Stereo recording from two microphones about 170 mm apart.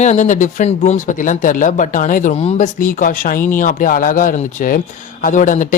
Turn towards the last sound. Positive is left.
turn(degrees=50)  # may be behind; listen again after turning